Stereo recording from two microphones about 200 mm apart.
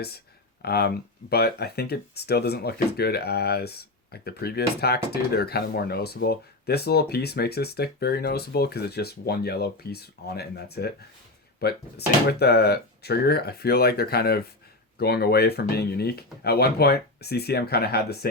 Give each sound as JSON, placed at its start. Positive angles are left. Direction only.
{"t": 0.6, "sound": "speech", "side_deg": 55}